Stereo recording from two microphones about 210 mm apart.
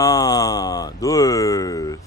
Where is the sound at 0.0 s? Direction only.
15° left (ahead or behind).